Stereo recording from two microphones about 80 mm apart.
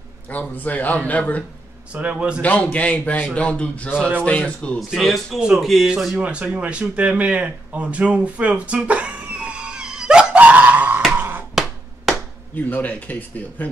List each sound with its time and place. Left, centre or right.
0.3 s speech: left
1.9 s a man's voice: centre
2.4 s a man's voice: centre
4.7 s a man's voice: centre
6.2 s a sound: centre
11.1 s music: right
12.5 s speech: left